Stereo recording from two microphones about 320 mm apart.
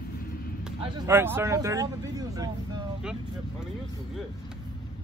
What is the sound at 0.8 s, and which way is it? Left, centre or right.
Speech, centre.